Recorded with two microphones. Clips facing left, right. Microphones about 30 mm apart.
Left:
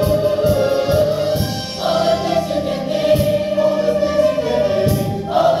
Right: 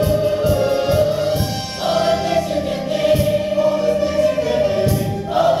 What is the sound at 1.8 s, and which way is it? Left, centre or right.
Music, centre.